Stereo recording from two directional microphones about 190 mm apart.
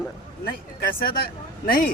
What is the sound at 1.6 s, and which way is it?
Speech, 50° left (ahead or behind).